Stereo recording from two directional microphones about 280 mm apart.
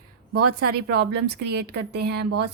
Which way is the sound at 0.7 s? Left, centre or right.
Right.